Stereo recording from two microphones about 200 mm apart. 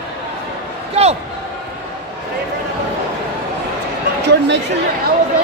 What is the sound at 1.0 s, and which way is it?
Speech, 30° right (ahead or behind).